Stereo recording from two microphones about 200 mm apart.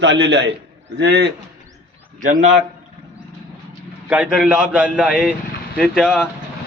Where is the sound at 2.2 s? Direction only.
40° right (ahead or behind).